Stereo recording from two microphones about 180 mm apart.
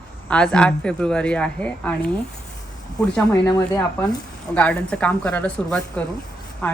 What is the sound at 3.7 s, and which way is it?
Speech, 20° left (ahead or behind).